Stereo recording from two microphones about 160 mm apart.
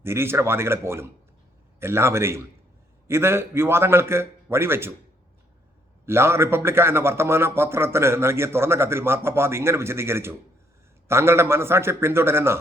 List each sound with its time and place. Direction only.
0.0 s a man's voice: 15° right (ahead or behind)
6.1 s a man's voice: 15° right (ahead or behind)